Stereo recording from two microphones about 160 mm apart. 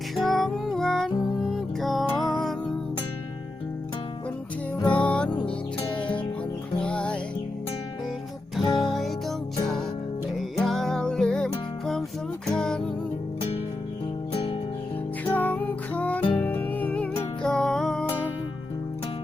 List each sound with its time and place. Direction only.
0.2 s music: centre (ahead or behind)
4.8 s music: 10° left (ahead or behind)
8.8 s music: centre (ahead or behind)
10.6 s music: centre (ahead or behind)
15.2 s music: 10° left (ahead or behind)